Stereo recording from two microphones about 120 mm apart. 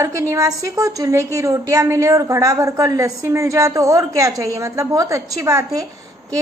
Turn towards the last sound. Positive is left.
turn(degrees=-25)  # may be behind; listen again after turning